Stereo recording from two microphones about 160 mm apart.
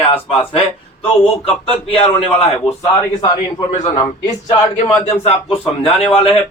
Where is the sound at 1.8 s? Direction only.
40° left (ahead or behind).